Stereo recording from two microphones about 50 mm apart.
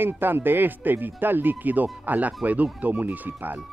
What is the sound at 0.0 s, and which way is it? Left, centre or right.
Speech, right.